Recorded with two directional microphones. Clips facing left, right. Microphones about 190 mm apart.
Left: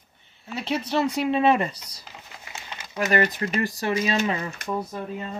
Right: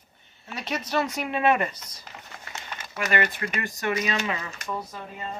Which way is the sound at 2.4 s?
20° left (ahead or behind).